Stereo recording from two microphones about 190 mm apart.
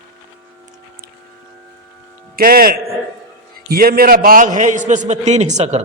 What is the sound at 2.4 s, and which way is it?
A man's voice, 50° right (ahead or behind).